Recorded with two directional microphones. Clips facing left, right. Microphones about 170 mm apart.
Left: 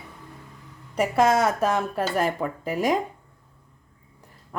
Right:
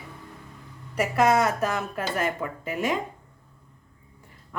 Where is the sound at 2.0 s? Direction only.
35° left (ahead or behind).